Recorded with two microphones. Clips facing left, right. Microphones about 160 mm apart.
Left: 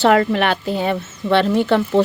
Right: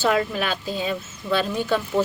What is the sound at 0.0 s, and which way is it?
A woman's voice, 65° left (ahead or behind).